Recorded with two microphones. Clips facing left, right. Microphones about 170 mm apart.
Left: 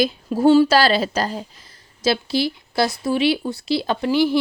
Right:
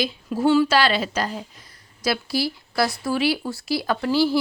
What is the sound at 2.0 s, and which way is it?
Speech, 25° left (ahead or behind).